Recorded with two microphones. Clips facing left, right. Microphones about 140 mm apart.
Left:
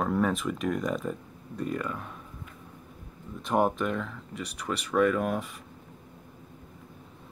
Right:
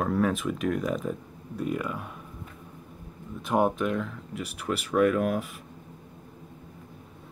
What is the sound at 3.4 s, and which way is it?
Speech, centre (ahead or behind).